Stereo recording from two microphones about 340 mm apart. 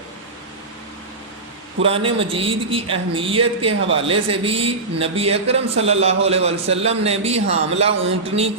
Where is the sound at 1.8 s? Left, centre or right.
Centre.